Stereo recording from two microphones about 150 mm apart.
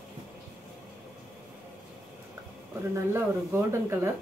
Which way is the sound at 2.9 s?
15° right (ahead or behind).